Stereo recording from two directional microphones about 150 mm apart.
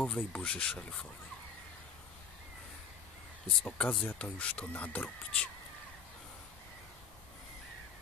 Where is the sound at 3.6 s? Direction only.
10° left (ahead or behind).